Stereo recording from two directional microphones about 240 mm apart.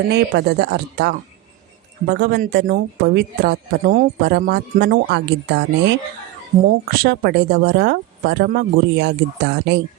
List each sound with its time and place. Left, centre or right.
0.1 s speech: right